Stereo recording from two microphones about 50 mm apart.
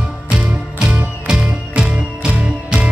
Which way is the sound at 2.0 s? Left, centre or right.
Centre.